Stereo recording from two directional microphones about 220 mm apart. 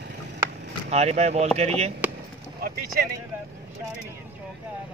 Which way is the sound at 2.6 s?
45° right (ahead or behind).